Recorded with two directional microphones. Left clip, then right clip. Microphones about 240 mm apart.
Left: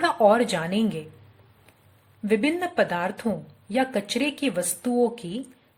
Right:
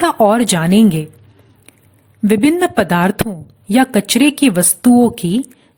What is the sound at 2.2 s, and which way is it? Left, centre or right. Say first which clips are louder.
A woman's voice: right 11 dB; right.